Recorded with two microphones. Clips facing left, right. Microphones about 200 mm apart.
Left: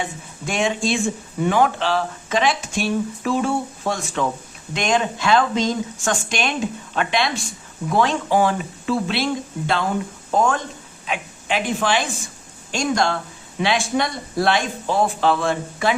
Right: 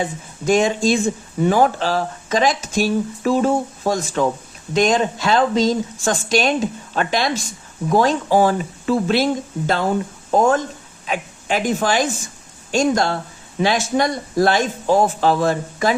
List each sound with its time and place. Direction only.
0.0 s speech: 40° right (ahead or behind)
11.0 s a woman's voice: 40° right (ahead or behind)